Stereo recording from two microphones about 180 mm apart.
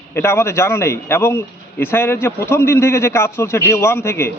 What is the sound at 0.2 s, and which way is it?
A man's voice, 15° left (ahead or behind).